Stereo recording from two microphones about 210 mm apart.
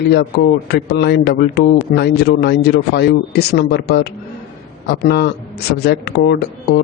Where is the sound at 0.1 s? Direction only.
50° left (ahead or behind).